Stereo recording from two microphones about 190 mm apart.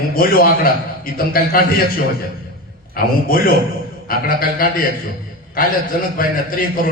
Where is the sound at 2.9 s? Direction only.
50° left (ahead or behind).